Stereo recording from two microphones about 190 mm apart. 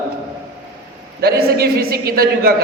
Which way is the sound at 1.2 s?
55° right (ahead or behind).